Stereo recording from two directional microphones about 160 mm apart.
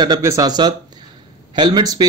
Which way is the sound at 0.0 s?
20° right (ahead or behind).